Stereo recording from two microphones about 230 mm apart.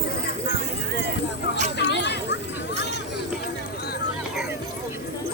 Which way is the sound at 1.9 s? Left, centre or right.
Left.